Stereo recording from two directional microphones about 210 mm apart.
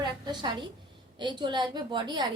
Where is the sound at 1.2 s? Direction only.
20° right (ahead or behind).